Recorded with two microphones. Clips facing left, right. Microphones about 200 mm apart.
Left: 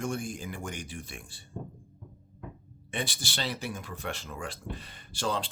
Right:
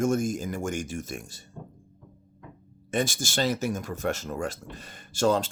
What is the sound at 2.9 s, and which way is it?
Speech, 45° right (ahead or behind).